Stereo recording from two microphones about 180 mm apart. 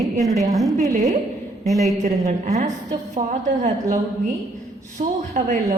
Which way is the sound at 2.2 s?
40° right (ahead or behind).